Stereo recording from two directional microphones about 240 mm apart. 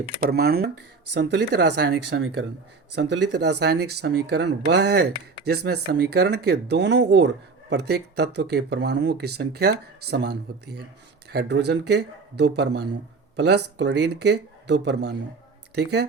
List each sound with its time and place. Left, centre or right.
0.2 s speech: right